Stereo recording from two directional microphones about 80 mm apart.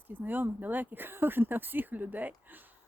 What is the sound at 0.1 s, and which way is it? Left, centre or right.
Speech, right.